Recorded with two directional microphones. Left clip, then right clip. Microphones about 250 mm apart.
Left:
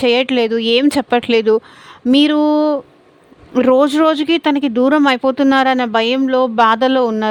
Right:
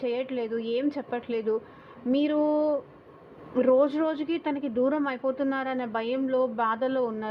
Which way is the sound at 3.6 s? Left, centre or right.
Left.